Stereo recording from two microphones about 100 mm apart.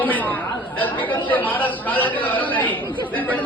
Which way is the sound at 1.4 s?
15° left (ahead or behind).